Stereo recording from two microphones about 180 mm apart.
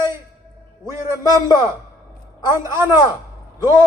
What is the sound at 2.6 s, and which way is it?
A man's voice, 15° right (ahead or behind).